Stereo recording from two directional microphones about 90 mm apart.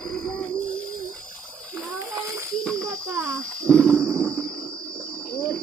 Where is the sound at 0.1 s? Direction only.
15° left (ahead or behind).